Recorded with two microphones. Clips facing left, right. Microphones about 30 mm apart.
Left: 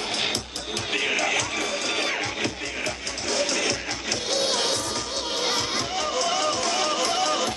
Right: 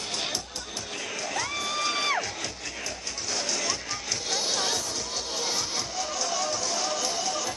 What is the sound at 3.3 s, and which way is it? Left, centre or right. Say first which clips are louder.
Music: left 6 dB; left.